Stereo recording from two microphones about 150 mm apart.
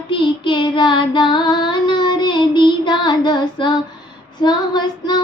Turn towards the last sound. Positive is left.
turn(degrees=30)  # may be behind; listen again after turning